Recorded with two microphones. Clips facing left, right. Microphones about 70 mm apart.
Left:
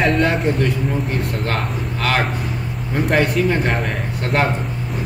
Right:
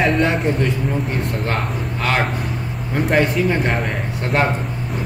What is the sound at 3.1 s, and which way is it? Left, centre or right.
A man's voice, centre.